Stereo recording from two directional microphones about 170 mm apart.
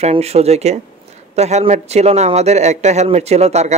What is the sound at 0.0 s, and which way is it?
A man's voice, 40° right (ahead or behind).